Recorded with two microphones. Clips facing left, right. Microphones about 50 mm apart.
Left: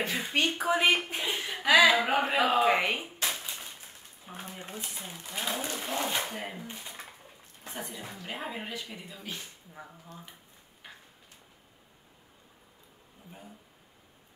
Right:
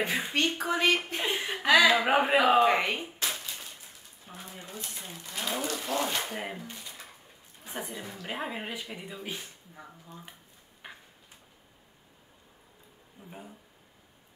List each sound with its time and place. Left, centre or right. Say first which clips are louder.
0.0 s speech: right 2 dB; centre
0.3 s speech: left 1 dB; centre
1.2 s speech: right 2 dB; centre
1.6 s speech: even; centre
2.0 s speech: right 3 dB; centre
4.3 s speech: left 2 dB; centre
5.6 s speech: right 2 dB; centre
8.3 s speech: right 2 dB; centre
10.8 s a sound: right 3 dB; centre
13.2 s speech: right 4 dB; right